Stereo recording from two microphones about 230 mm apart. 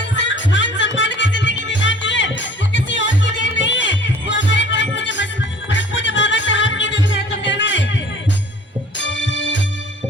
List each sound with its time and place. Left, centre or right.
0.0 s music: left